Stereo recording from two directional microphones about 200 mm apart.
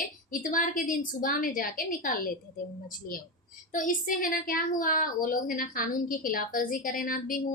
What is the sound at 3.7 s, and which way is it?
A woman's voice, 40° left (ahead or behind).